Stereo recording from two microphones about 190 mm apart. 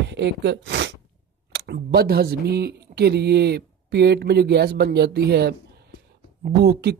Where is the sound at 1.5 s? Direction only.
60° right (ahead or behind).